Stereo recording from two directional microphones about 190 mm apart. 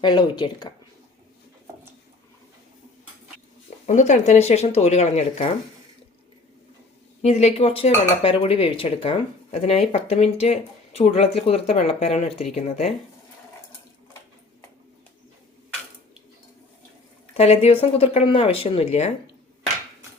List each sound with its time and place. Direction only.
0.0 s speech: 25° left (ahead or behind)
3.8 s speech: 40° left (ahead or behind)
7.2 s speech: 35° left (ahead or behind)
17.3 s speech: 35° left (ahead or behind)